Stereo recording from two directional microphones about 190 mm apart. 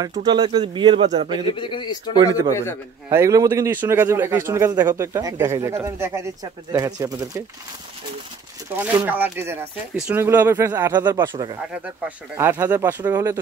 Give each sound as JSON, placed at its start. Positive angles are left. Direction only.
{"t": 0.2, "sound": "speech", "side_deg": -25}
{"t": 1.5, "sound": "speech", "side_deg": 25}
{"t": 2.5, "sound": "a man's voice", "side_deg": 10}
{"t": 3.1, "sound": "speech", "side_deg": -15}
{"t": 8.7, "sound": "speech", "side_deg": -10}
{"t": 10.9, "sound": "speech", "side_deg": -20}
{"t": 11.7, "sound": "speech", "side_deg": -5}